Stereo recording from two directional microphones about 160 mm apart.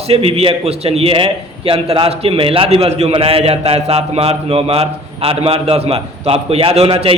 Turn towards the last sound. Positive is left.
turn(degrees=-35)  # may be behind; listen again after turning